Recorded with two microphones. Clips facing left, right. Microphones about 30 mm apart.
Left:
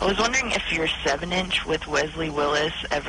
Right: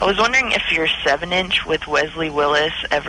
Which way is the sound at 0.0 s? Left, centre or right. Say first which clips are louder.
Right 6 dB; right.